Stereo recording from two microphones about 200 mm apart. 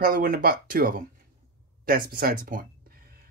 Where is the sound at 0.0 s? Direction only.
45° right (ahead or behind).